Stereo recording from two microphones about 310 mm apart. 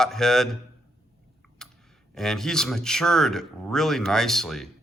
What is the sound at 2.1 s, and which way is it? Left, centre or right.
Speech, centre.